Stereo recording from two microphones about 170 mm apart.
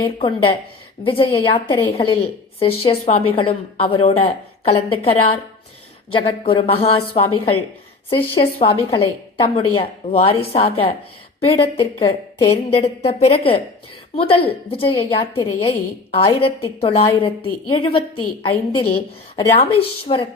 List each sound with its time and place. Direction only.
0.0 s a woman's voice: 30° left (ahead or behind)